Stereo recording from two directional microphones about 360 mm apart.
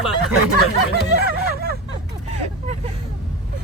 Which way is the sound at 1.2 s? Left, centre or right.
Right.